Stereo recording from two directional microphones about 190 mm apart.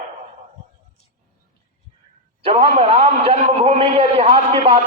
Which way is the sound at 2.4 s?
30° right (ahead or behind).